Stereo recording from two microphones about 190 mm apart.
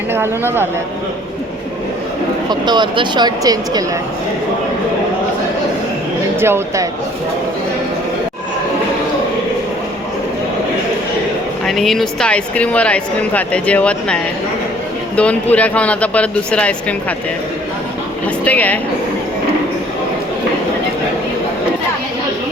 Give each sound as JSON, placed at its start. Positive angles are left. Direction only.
{"t": 0.1, "sound": "speech", "side_deg": -10}
{"t": 2.5, "sound": "speech", "side_deg": -25}
{"t": 6.4, "sound": "speech", "side_deg": -15}
{"t": 11.6, "sound": "speech", "side_deg": 0}
{"t": 18.4, "sound": "speech", "side_deg": 10}